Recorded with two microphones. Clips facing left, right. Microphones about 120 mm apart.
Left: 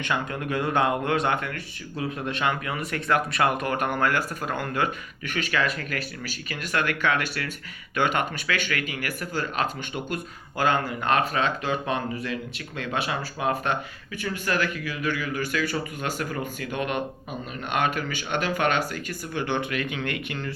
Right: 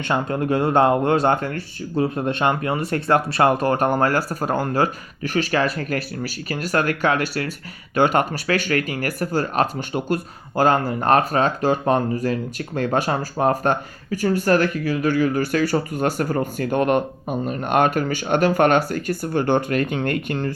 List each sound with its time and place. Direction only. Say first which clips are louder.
0.0 s speech: right 6 dB; 35° right (ahead or behind)